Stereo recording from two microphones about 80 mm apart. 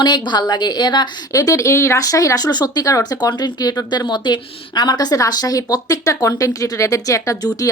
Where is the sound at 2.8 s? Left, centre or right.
Left.